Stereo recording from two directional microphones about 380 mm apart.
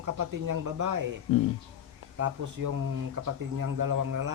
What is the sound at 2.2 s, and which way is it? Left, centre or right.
Speech, right.